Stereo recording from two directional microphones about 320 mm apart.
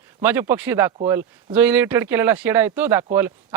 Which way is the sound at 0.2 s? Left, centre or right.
Centre.